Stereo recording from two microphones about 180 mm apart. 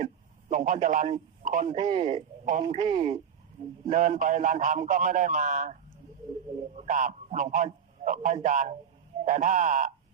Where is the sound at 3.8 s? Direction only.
40° right (ahead or behind).